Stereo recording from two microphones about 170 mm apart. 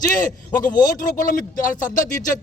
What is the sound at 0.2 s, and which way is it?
Speech, 50° left (ahead or behind).